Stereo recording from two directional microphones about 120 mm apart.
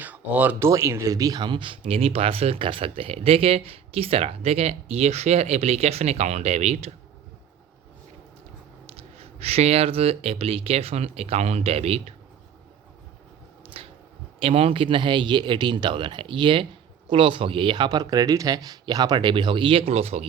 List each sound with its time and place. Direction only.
0.0 s speech: 10° right (ahead or behind)
0.7 s speech: 25° right (ahead or behind); by 6.9 s 65° right (ahead or behind)
9.1 s speech: 60° right (ahead or behind)
13.7 s a sound: 55° right (ahead or behind)
14.3 s speech: 55° right (ahead or behind)